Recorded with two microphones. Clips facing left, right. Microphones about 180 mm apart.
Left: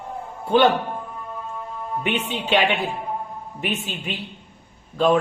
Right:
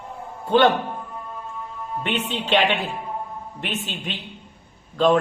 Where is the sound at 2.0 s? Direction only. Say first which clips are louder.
Even; 10° left (ahead or behind).